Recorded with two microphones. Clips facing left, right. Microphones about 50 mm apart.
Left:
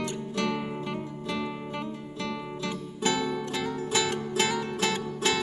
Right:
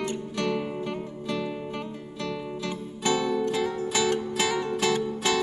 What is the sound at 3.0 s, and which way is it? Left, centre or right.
Music, left.